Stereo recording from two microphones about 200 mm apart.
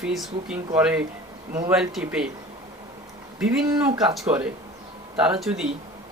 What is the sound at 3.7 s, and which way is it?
Speech, 15° right (ahead or behind).